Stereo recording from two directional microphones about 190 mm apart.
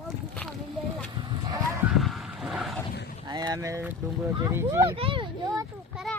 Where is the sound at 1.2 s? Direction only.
20° right (ahead or behind).